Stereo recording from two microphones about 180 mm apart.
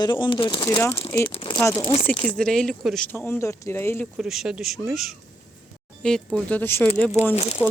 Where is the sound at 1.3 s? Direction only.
30° left (ahead or behind).